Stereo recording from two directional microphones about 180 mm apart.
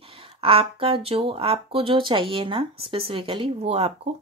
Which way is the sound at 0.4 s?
30° right (ahead or behind).